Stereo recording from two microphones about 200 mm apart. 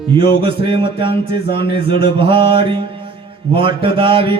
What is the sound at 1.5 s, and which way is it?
Speech, 55° left (ahead or behind).